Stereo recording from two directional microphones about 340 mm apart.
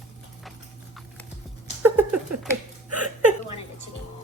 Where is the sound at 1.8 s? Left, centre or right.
Right.